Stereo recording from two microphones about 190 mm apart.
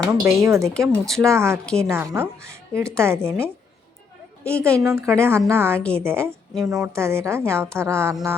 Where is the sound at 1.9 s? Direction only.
15° right (ahead or behind).